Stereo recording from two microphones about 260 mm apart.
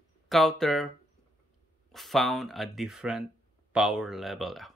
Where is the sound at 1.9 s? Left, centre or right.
Centre.